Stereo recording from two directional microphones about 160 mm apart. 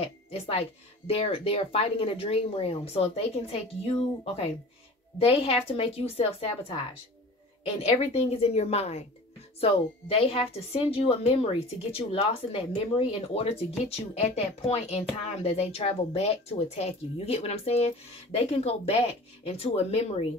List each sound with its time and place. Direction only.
0.0 s a woman's voice: 40° left (ahead or behind)
8.0 s a woman's voice: 40° left (ahead or behind)